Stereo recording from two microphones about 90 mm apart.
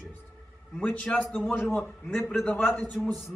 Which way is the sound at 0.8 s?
15° left (ahead or behind).